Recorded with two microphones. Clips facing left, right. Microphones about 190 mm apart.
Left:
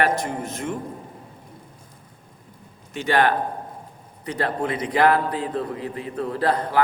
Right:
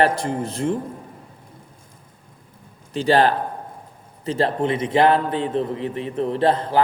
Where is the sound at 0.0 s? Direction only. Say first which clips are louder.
Right 3 dB; 30° right (ahead or behind).